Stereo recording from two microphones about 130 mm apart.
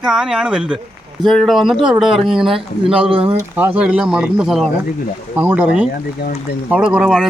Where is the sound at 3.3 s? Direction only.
15° right (ahead or behind).